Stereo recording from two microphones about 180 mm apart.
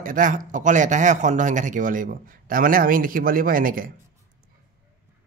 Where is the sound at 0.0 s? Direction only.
50° right (ahead or behind).